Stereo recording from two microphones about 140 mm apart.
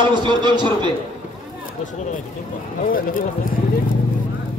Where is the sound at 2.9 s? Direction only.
90° left.